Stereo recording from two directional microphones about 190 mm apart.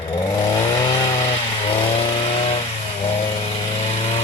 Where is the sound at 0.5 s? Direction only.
20° left (ahead or behind).